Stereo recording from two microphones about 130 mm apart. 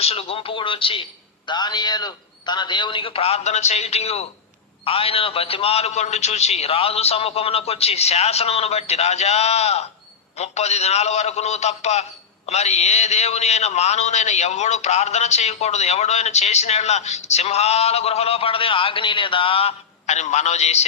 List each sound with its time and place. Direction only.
0.0 s a man's voice: 50° left (ahead or behind)